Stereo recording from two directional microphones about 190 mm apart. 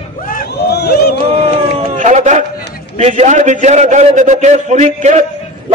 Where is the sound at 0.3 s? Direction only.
60° left (ahead or behind).